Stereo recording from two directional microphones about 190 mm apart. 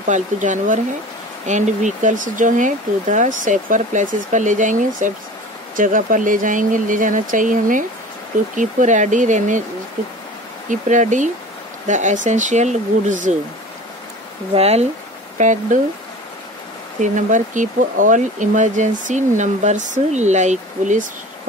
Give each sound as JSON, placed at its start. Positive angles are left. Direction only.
{"t": 0.0, "sound": "speech", "side_deg": -40}
{"t": 10.7, "sound": "speech", "side_deg": -40}
{"t": 14.5, "sound": "speech", "side_deg": -35}
{"t": 17.0, "sound": "speech", "side_deg": -40}